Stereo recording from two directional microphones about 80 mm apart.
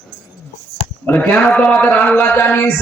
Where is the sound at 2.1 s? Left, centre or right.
Left.